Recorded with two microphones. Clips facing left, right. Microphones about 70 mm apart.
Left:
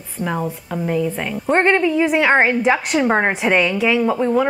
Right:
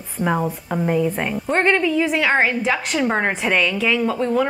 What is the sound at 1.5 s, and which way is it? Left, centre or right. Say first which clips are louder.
A woman's voice: left 2 dB; centre.